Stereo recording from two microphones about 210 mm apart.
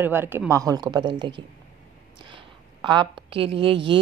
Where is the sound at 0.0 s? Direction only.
10° right (ahead or behind).